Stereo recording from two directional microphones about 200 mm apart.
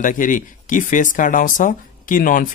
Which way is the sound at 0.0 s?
40° left (ahead or behind).